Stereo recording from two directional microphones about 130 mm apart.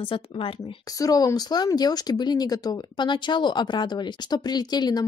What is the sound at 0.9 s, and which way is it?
Speech, 30° left (ahead or behind).